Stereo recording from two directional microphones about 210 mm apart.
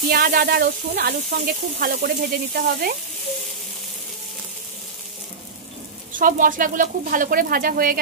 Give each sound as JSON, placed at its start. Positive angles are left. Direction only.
{"t": 0.1, "sound": "speech", "side_deg": -45}
{"t": 6.1, "sound": "speech", "side_deg": -40}